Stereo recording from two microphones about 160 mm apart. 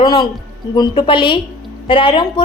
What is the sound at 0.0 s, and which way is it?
A woman's voice, 25° left (ahead or behind).